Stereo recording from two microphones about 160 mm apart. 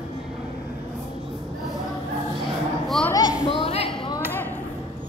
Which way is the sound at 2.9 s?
5° left (ahead or behind).